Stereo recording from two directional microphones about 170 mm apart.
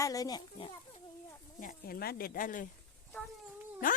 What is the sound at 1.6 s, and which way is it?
Speech, 55° left (ahead or behind).